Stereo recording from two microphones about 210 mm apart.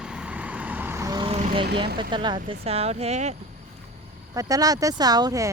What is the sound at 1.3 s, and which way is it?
Vehicle, 30° right (ahead or behind).